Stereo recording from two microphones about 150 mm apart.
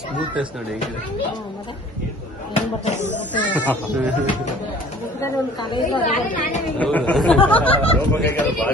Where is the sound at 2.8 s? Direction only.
50° left (ahead or behind).